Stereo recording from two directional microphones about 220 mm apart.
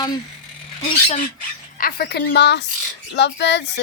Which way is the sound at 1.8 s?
45° left (ahead or behind).